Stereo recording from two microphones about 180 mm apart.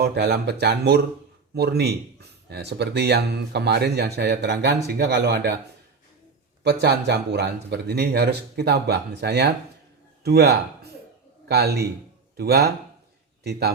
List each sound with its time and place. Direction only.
0.0 s speech: 65° right (ahead or behind)
6.6 s speech: 65° right (ahead or behind)